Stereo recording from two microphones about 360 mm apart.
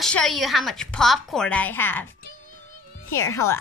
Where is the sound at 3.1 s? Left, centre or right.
Centre.